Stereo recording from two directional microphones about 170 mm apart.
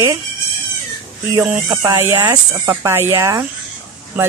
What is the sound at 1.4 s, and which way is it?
Speech, 15° right (ahead or behind).